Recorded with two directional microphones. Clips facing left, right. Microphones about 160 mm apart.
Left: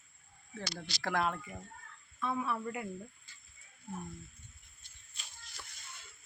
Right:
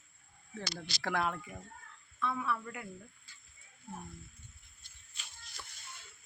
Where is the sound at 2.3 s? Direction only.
25° left (ahead or behind).